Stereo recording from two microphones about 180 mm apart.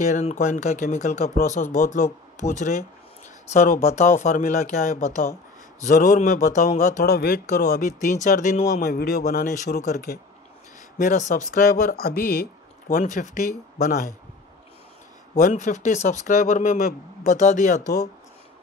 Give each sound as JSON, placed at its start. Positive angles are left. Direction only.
{"t": 0.0, "sound": "speech", "side_deg": 40}
{"t": 7.1, "sound": "speech", "side_deg": 60}
{"t": 9.2, "sound": "speech", "side_deg": 45}
{"t": 15.3, "sound": "speech", "side_deg": 45}